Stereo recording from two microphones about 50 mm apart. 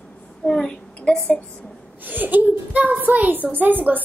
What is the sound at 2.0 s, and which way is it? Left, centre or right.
A woman's voice, right.